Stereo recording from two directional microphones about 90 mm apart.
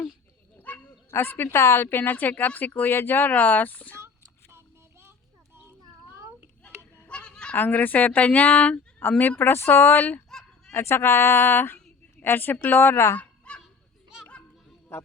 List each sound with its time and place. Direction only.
0.7 s dog: 20° left (ahead or behind)
1.1 s speech: 25° left (ahead or behind)
4.5 s child singing: 25° right (ahead or behind)
6.9 s speech: 15° left (ahead or behind)
10.2 s fowl: 5° left (ahead or behind)
10.8 s speech: 30° left (ahead or behind)
13.1 s honk: 10° left (ahead or behind)